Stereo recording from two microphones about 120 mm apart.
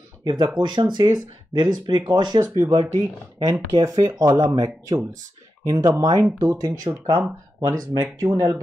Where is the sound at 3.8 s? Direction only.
30° right (ahead or behind).